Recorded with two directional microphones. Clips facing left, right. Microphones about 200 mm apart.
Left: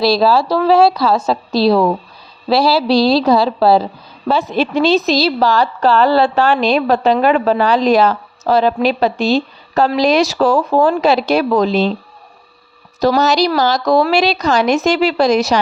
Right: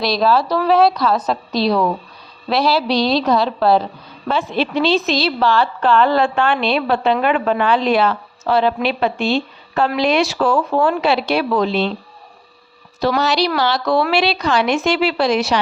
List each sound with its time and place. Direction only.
0.0 s a woman's voice: 30° left (ahead or behind)
13.0 s speech: 40° left (ahead or behind)